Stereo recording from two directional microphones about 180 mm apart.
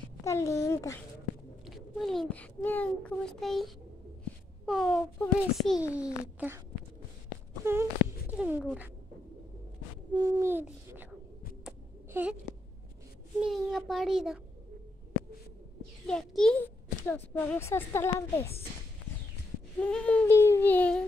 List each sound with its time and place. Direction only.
0.2 s speech: 15° left (ahead or behind)
1.7 s a child's voice: centre (ahead or behind)
7.6 s speech: 15° right (ahead or behind)
10.1 s a child's voice: 15° right (ahead or behind)
12.1 s speech: 10° right (ahead or behind)
13.4 s a child's voice: centre (ahead or behind)
16.1 s a child's voice: 5° left (ahead or behind)
19.8 s a woman's voice: 5° left (ahead or behind)